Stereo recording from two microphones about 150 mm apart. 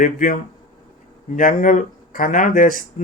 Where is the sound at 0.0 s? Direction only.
60° left (ahead or behind).